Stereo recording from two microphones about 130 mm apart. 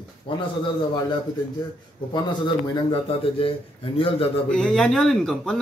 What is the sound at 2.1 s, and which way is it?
Speech, 35° left (ahead or behind).